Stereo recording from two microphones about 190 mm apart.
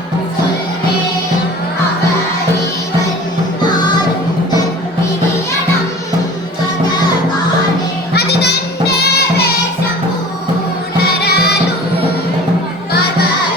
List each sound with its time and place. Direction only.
8.1 s music: 60° left (ahead or behind)
11.2 s music: 60° left (ahead or behind)